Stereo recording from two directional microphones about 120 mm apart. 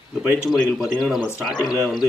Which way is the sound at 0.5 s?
Centre (ahead or behind).